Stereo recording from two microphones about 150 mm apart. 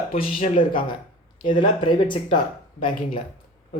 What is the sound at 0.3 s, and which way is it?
Speech, 60° left (ahead or behind).